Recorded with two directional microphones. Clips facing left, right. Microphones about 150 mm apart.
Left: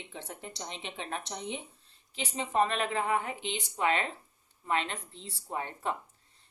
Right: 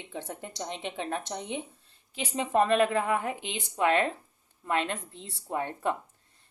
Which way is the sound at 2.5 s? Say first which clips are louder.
Right 5 dB; 50° right (ahead or behind).